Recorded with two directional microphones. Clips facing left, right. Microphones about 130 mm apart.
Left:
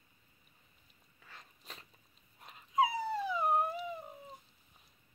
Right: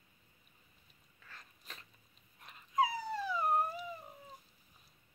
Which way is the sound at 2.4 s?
25° left (ahead or behind).